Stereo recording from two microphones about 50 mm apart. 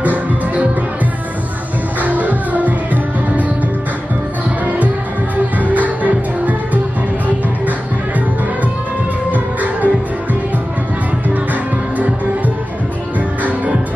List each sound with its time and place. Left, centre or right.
0.0 s music: right
2.0 s music: right
5.6 s music: right
9.3 s music: right